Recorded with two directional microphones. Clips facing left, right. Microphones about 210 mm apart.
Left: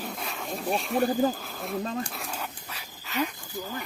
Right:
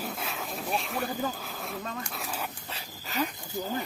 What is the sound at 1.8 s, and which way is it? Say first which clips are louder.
Dog: left 6 dB; 30° left (ahead or behind).